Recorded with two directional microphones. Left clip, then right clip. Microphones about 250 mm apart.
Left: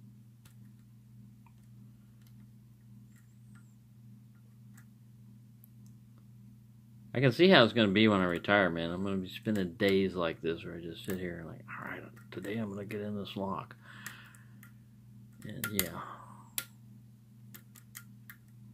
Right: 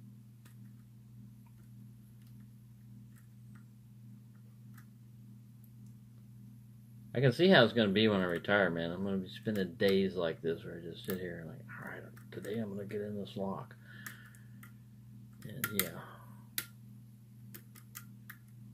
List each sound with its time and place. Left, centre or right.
7.1 s speech: left
15.4 s speech: left